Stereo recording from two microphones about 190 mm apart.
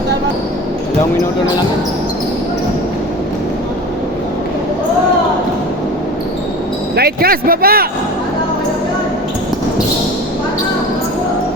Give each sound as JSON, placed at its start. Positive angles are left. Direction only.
{"t": 6.9, "sound": "speech", "side_deg": -55}